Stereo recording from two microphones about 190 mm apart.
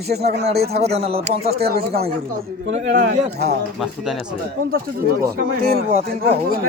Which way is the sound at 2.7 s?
40° right (ahead or behind).